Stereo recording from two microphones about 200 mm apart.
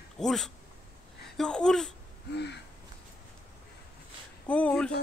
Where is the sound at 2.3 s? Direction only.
55° left (ahead or behind).